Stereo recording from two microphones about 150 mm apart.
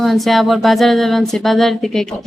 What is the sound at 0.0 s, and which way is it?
Speech, centre (ahead or behind).